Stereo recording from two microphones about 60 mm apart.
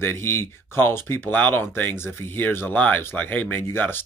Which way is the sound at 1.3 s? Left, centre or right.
Left.